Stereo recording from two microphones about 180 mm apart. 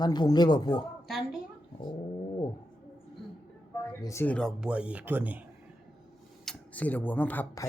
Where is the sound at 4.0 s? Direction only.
15° left (ahead or behind); by 5.4 s 10° right (ahead or behind).